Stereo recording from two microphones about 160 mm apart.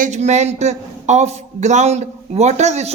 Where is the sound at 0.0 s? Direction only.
45° right (ahead or behind).